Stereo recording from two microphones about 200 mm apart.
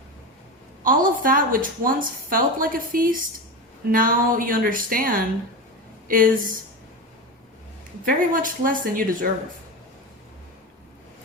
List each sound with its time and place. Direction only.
0.9 s a woman's voice: 45° right (ahead or behind)
8.0 s a woman's voice: 45° right (ahead or behind)